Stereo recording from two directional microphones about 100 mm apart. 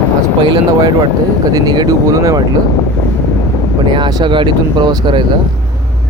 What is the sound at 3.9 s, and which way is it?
Speech, 45° right (ahead or behind).